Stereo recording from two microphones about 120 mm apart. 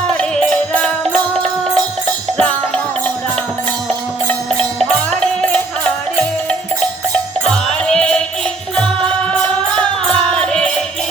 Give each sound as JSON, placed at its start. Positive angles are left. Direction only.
{"t": 0.1, "sound": "music", "side_deg": 5}
{"t": 4.4, "sound": "music", "side_deg": 5}
{"t": 7.4, "sound": "music", "side_deg": 5}